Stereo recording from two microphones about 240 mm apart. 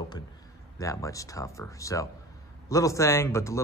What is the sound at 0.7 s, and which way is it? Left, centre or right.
Speech, centre.